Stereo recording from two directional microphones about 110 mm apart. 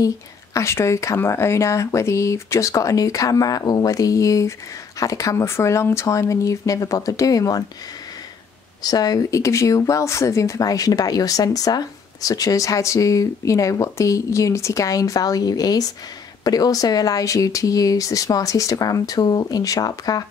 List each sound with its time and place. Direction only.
0.6 s speech: 25° left (ahead or behind)
8.8 s speech: 35° left (ahead or behind)